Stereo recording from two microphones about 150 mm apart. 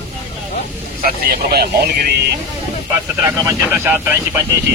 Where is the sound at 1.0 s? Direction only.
80° right.